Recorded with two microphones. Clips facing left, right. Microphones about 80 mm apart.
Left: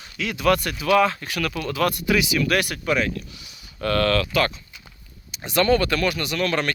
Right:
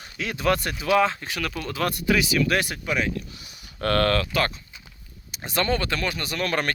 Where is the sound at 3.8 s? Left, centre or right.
Right.